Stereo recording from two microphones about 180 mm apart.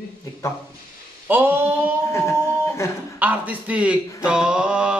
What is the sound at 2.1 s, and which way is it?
Speech, 15° left (ahead or behind).